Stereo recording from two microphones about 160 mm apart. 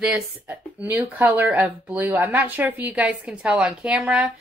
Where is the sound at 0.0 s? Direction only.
5° right (ahead or behind).